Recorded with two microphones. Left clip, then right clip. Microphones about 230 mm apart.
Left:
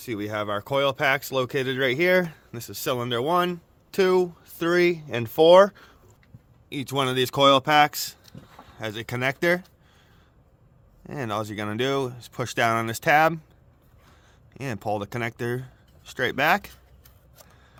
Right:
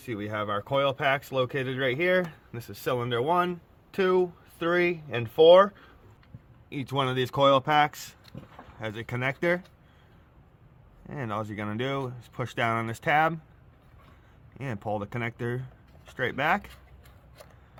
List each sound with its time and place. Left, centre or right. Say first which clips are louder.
0.0 s speech: left 3 dB; left
6.7 s speech: left 3 dB; left
11.0 s speech: left 4 dB; left
14.5 s speech: left 4 dB; left